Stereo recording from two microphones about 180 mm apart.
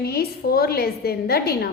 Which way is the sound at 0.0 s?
60° left (ahead or behind).